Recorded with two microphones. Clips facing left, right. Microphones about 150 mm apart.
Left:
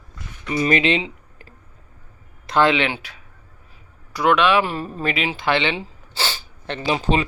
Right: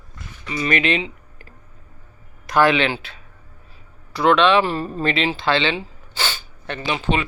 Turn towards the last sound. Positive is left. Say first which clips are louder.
# left 2 dB
turn(degrees=35)  # may be behind; listen again after turning